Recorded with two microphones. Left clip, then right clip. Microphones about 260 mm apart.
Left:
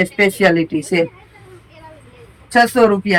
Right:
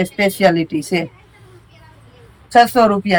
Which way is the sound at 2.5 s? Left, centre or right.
Centre.